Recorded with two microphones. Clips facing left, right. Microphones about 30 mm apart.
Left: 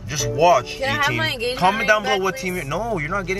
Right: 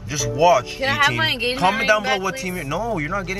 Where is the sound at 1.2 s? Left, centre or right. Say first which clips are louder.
Right 2 dB; right.